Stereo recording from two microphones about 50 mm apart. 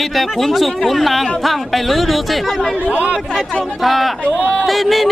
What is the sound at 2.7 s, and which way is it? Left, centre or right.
Speech, right.